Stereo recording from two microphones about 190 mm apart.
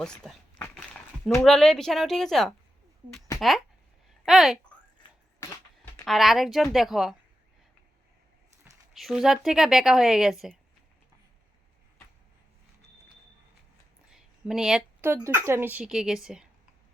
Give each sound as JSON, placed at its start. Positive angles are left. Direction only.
{"t": 0.0, "sound": "speech", "side_deg": 5}
{"t": 4.3, "sound": "a woman's voice", "side_deg": 0}
{"t": 5.4, "sound": "a sound", "side_deg": 15}
{"t": 6.1, "sound": "a woman's voice", "side_deg": 0}
{"t": 8.9, "sound": "a woman's voice", "side_deg": 0}
{"t": 14.1, "sound": "a woman's voice", "side_deg": -5}